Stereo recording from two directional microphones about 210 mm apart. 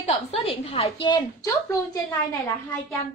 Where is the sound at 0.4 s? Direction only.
25° left (ahead or behind).